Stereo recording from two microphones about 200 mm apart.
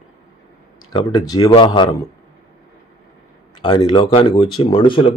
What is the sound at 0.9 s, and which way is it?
Speech, 20° left (ahead or behind).